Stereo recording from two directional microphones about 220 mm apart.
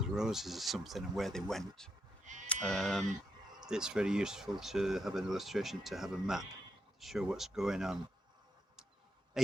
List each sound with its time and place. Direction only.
0.0 s speech: centre (ahead or behind)
2.2 s sheep: 35° right (ahead or behind)
2.5 s speech: 5° left (ahead or behind)